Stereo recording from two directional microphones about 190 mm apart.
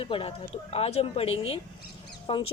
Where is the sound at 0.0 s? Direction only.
30° left (ahead or behind).